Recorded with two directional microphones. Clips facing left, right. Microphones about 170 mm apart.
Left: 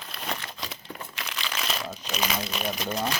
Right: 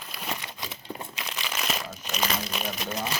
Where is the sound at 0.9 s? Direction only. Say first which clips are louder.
Right 1 dB; 20° right (ahead or behind).